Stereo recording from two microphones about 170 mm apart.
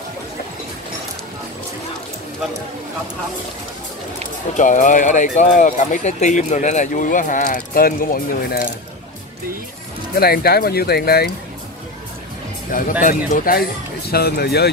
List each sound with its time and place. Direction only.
4.6 s speech: 50° left (ahead or behind)
10.1 s speech: 65° left (ahead or behind)
13.0 s speech: 50° left (ahead or behind); by 14.7 s 70° left (ahead or behind)